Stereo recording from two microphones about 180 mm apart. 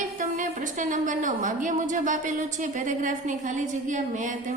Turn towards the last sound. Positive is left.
turn(degrees=-45)  # may be behind; listen again after turning